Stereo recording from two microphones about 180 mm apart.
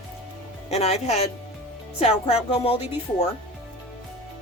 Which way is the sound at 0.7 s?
35° left (ahead or behind).